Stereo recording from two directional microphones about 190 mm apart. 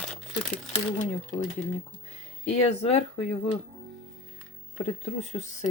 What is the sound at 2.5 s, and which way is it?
Speech, 35° left (ahead or behind).